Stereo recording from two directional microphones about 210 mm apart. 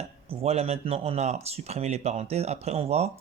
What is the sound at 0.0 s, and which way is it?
Speech, 30° right (ahead or behind).